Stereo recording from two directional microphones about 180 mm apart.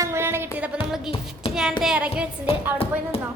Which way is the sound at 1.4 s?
30° left (ahead or behind).